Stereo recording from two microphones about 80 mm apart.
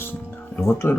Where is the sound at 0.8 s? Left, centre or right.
Left.